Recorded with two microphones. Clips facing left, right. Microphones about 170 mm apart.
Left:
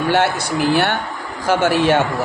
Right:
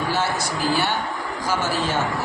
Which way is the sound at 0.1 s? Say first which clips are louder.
Left 6 dB; 65° left (ahead or behind).